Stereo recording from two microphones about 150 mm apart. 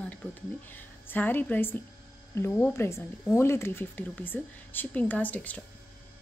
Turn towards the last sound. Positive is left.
turn(degrees=10)  # may be behind; listen again after turning